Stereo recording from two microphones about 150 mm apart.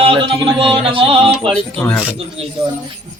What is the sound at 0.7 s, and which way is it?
Speech, 35° right (ahead or behind).